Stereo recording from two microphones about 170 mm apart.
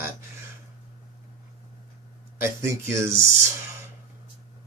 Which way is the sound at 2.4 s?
15° right (ahead or behind).